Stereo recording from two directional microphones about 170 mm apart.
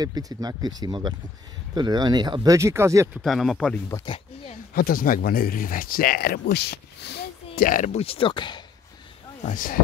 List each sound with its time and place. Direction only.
0.0 s speech: 20° right (ahead or behind)
3.2 s speech: centre (ahead or behind)
3.9 s speech: 30° left (ahead or behind)
4.7 s speech: 60° left (ahead or behind); by 7.2 s 80° left
7.5 s speech: 55° left (ahead or behind); by 8.6 s 25° left (ahead or behind)
9.5 s speech: 50° left (ahead or behind)